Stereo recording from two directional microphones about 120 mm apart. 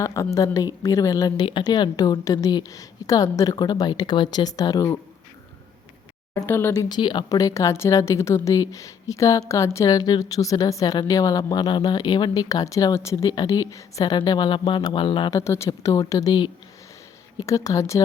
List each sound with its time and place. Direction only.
0.0 s speech: 25° left (ahead or behind)
1.5 s a woman's voice: 40° left (ahead or behind)
6.3 s speech: 20° left (ahead or behind)
6.7 s a woman's voice: 35° left (ahead or behind)
15.3 s speech: 25° left (ahead or behind)